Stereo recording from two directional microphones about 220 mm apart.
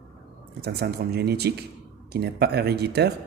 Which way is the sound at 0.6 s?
45° right (ahead or behind).